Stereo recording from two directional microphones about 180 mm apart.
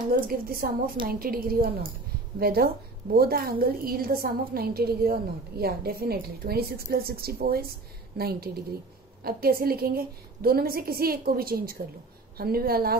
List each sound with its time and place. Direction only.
0.1 s a woman's voice: 55° right (ahead or behind)